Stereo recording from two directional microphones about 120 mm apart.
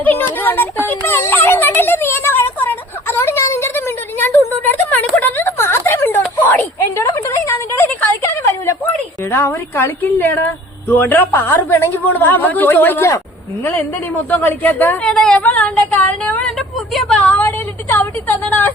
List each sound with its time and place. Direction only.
0.0 s speech: 15° left (ahead or behind)
0.9 s a sound: 20° left (ahead or behind)
9.3 s speech: 20° left (ahead or behind)
14.3 s a woman's voice: 15° left (ahead or behind)
17.2 s a woman's voice: 15° left (ahead or behind)